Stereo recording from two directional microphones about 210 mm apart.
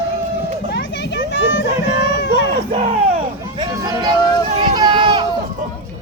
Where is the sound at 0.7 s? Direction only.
60° left (ahead or behind).